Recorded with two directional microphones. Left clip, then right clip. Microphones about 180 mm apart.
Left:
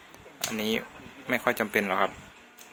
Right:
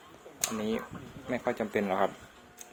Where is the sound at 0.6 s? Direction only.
5° right (ahead or behind).